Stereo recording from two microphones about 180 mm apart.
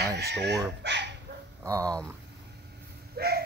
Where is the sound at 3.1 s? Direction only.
60° right (ahead or behind).